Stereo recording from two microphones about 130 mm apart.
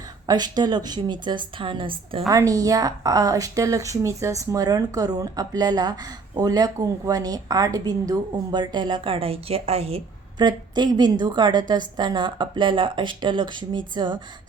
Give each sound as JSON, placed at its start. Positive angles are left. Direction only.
{"t": 0.3, "sound": "a woman's voice", "side_deg": -30}
{"t": 2.3, "sound": "a woman's voice", "side_deg": -25}
{"t": 10.3, "sound": "a woman's voice", "side_deg": -35}